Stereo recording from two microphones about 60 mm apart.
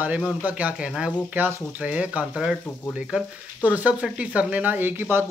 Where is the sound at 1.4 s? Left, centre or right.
Right.